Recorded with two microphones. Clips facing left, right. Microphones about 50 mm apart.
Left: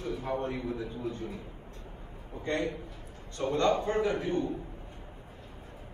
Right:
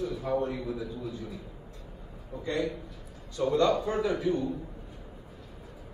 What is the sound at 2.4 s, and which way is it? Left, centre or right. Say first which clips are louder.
A man's voice: right 1 dB; left.